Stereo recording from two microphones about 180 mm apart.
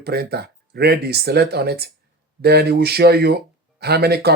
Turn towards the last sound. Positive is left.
turn(degrees=-60)  # may be behind; listen again after turning